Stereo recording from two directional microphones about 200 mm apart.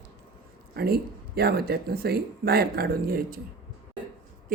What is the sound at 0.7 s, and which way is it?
Speech, 50° right (ahead or behind).